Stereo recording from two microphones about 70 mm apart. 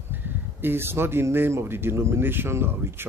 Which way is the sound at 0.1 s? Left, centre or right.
Right.